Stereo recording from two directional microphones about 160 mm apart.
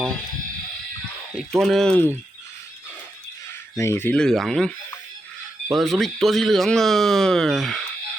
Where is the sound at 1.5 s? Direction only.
Centre (ahead or behind).